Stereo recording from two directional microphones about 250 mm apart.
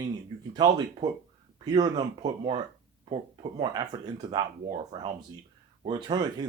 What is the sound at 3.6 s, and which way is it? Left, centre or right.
Speech, centre.